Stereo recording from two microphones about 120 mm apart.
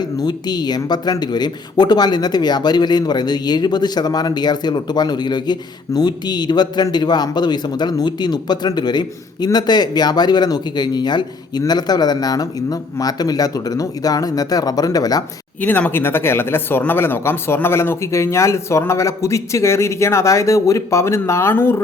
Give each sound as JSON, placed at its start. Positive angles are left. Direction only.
{"t": 0.0, "sound": "speech", "side_deg": 35}
{"t": 15.6, "sound": "speech", "side_deg": 15}